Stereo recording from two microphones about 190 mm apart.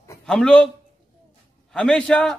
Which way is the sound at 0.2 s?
5° left (ahead or behind).